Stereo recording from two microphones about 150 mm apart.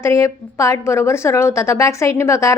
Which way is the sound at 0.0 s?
20° left (ahead or behind).